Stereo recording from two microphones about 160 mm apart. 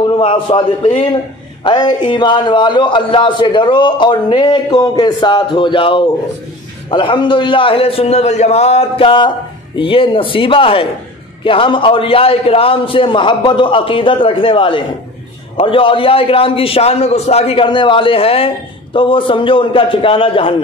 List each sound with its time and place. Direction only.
0.2 s a man's voice: 35° left (ahead or behind)